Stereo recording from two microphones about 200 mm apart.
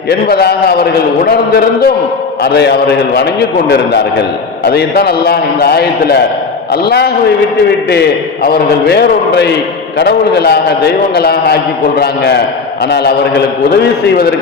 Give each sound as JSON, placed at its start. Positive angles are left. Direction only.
{"t": 0.1, "sound": "a man's voice", "side_deg": 55}
{"t": 4.6, "sound": "a man's voice", "side_deg": 55}
{"t": 8.4, "sound": "a man's voice", "side_deg": 50}